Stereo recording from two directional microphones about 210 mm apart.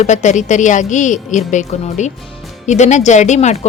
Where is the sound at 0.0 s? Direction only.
35° left (ahead or behind).